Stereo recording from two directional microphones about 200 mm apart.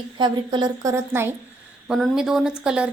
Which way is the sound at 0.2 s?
20° right (ahead or behind).